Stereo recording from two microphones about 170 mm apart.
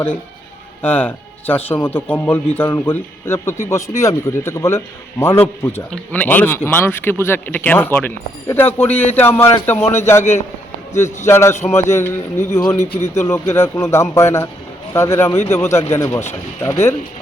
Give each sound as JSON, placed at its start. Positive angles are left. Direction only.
{"t": 0.8, "sound": "a man's voice", "side_deg": 10}